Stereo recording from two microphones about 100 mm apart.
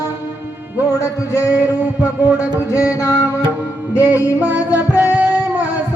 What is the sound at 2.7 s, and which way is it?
Music, 30° left (ahead or behind).